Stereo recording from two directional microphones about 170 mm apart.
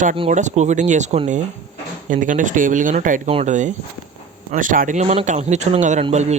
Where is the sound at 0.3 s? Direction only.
45° right (ahead or behind).